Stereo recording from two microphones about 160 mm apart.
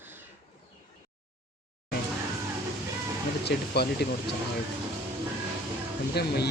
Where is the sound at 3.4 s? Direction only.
90° left.